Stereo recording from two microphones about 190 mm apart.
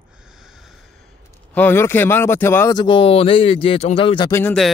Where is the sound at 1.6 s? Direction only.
10° left (ahead or behind).